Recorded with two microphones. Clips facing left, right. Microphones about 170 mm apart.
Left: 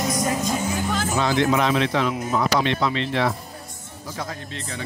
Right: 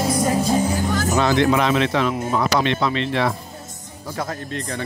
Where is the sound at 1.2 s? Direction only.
65° right (ahead or behind).